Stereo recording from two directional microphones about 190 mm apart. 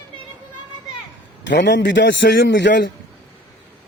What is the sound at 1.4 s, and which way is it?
A man's voice, 70° left (ahead or behind).